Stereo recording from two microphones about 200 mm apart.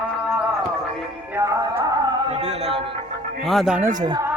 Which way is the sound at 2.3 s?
35° right (ahead or behind).